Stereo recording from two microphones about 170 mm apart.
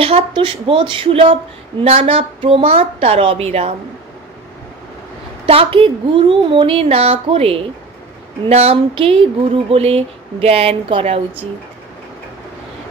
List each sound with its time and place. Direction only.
0.0 s a woman's voice: 30° right (ahead or behind)
5.5 s a woman's voice: 30° right (ahead or behind)